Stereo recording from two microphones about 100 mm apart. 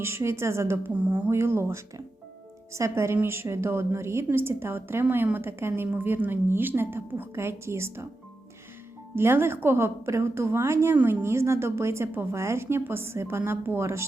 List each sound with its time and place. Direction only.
0.0 s a woman's voice: 25° right (ahead or behind)
9.1 s a woman's voice: 25° right (ahead or behind)